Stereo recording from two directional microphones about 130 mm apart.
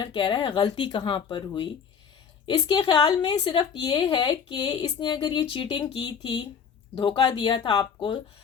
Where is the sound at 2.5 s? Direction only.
35° left (ahead or behind).